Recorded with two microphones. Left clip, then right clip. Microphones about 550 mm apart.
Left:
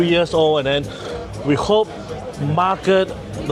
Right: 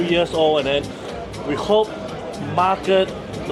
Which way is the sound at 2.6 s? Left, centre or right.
Left.